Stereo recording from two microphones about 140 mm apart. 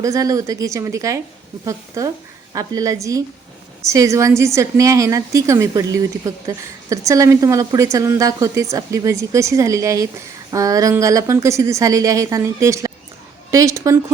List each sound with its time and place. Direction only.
0.0 s a woman's voice: 25° right (ahead or behind)